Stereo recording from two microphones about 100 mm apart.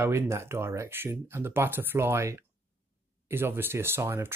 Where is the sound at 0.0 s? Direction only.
25° right (ahead or behind).